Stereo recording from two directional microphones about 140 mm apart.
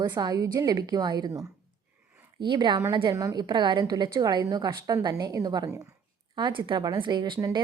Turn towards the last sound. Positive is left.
turn(degrees=-35)  # may be behind; listen again after turning